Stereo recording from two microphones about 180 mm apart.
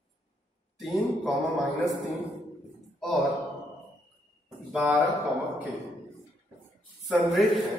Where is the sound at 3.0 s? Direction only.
Centre (ahead or behind).